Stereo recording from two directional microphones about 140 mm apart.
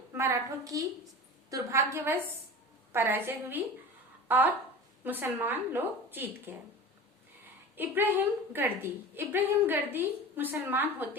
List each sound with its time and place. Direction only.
0.1 s a woman's voice: 20° right (ahead or behind)
7.8 s a woman's voice: 15° right (ahead or behind)